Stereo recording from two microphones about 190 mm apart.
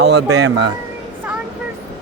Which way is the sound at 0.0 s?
60° right (ahead or behind).